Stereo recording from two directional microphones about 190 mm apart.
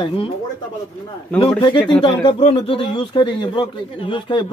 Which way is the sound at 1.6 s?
25° left (ahead or behind).